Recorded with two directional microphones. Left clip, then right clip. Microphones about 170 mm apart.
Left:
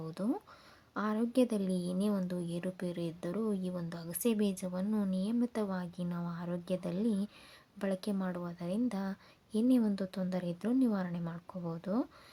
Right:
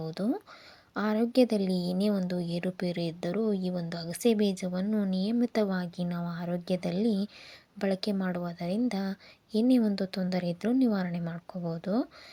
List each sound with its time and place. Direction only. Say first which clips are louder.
0.0 s a woman's voice: right 5 dB; 15° right (ahead or behind)